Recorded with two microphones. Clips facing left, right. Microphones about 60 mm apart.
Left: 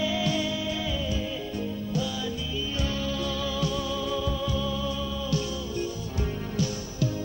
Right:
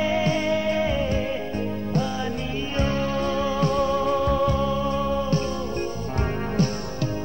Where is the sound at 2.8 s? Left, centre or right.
Right.